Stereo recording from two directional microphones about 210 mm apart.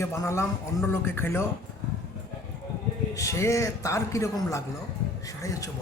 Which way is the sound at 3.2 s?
15° left (ahead or behind).